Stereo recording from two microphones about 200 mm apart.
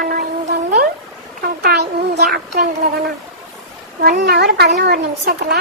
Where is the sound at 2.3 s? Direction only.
55° right (ahead or behind).